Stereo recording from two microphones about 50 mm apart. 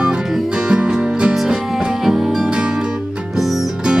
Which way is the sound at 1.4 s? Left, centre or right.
Centre.